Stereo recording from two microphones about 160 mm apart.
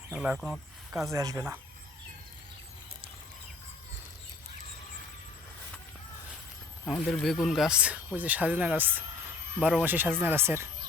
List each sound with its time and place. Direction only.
0.1 s speech: 5° right (ahead or behind)
1.1 s speech: 20° right (ahead or behind)
6.8 s speech: centre (ahead or behind); by 10.7 s 15° right (ahead or behind)